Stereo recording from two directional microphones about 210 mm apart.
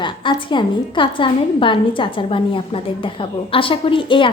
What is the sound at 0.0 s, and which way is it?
A woman's voice, 25° left (ahead or behind).